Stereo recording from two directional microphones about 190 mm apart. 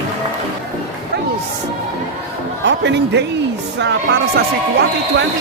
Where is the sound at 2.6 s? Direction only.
65° right (ahead or behind).